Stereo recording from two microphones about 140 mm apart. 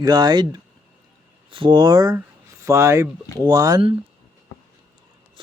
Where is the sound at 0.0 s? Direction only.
30° right (ahead or behind).